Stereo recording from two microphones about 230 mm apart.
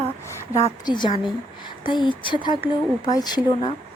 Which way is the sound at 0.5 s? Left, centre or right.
Centre.